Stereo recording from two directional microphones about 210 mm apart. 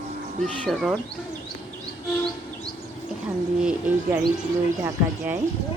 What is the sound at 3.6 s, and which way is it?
A woman's voice, 5° right (ahead or behind).